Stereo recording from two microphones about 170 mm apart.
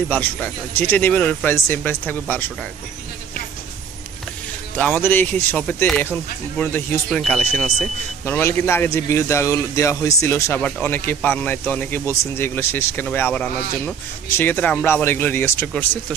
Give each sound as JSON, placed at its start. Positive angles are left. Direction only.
{"t": 0.1, "sound": "a man's voice", "side_deg": 10}
{"t": 4.7, "sound": "a man's voice", "side_deg": 10}
{"t": 8.4, "sound": "a man's voice", "side_deg": 15}